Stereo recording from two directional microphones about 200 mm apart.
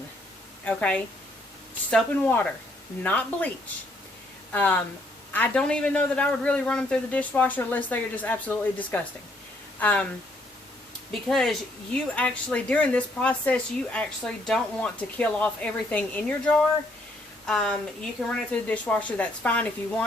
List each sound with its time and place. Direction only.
0.6 s a man's voice: 5° left (ahead or behind)
4.5 s a man's voice: 5° left (ahead or behind)
11.1 s a man's voice: centre (ahead or behind)